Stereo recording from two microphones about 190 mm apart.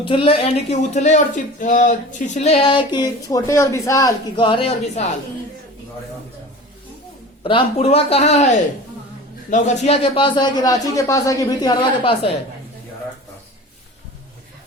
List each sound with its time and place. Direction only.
0.0 s speech: 25° left (ahead or behind)
7.4 s a man's voice: 30° left (ahead or behind)